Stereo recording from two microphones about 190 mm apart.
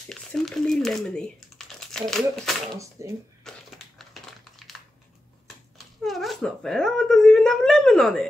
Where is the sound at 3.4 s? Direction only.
Centre (ahead or behind).